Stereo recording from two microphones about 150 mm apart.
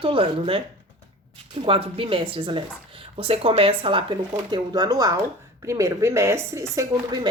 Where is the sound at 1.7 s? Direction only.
35° right (ahead or behind).